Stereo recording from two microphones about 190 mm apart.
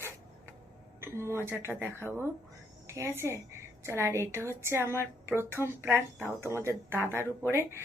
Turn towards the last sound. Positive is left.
turn(degrees=-15)  # may be behind; listen again after turning